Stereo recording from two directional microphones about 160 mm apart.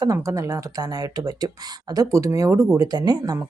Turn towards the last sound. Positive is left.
turn(degrees=-25)  # may be behind; listen again after turning